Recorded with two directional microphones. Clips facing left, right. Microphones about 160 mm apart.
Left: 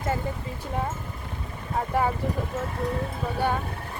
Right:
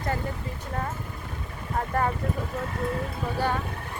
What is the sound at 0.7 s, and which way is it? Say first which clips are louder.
Speech: left 3 dB; 10° left (ahead or behind).